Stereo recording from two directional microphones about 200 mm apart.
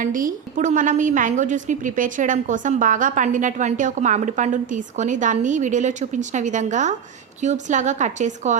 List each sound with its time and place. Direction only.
0.0 s a woman's voice: 40° right (ahead or behind)